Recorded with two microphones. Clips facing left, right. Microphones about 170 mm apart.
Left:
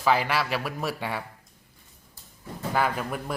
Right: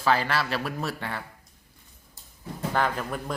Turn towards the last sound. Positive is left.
turn(degrees=10)  # may be behind; listen again after turning